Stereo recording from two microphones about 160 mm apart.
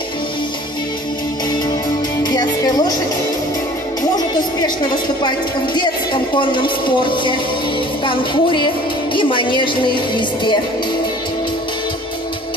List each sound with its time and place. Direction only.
2.2 s music: 25° left (ahead or behind)
6.3 s speech: 30° left (ahead or behind)
10.1 s music: 30° left (ahead or behind)